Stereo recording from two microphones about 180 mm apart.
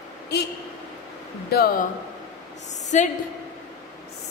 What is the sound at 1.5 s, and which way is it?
Speech, 60° left (ahead or behind).